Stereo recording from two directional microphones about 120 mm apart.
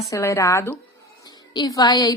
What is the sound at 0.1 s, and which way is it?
Speech, 25° left (ahead or behind).